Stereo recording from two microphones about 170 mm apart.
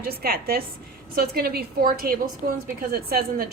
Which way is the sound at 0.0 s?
65° right (ahead or behind).